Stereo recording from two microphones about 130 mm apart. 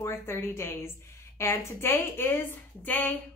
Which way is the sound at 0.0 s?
20° left (ahead or behind).